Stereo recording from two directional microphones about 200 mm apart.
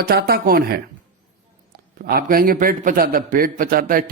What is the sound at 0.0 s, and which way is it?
A man's voice, 50° right (ahead or behind).